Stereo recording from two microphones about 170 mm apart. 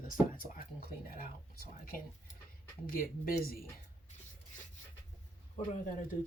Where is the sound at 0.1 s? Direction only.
55° left (ahead or behind).